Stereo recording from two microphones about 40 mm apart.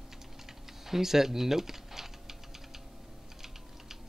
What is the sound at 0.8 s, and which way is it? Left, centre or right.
Speech, centre.